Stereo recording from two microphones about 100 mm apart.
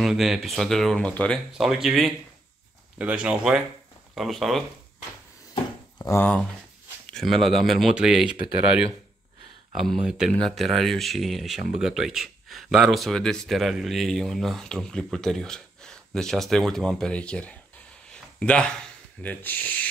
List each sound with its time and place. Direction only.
0.0 s speech: 5° right (ahead or behind)
1.6 s speech: 5° right (ahead or behind)
6.0 s speech: 45° left (ahead or behind)
7.1 s speech: centre (ahead or behind)
9.8 s speech: 5° right (ahead or behind); by 17.6 s 10° left (ahead or behind)
18.1 s a sound: 10° left (ahead or behind)
19.2 s speech: 15° left (ahead or behind)